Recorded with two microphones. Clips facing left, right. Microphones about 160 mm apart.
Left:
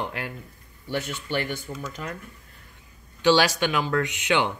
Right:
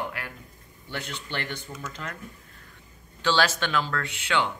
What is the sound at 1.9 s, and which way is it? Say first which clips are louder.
Speech: left 1 dB; 15° left (ahead or behind).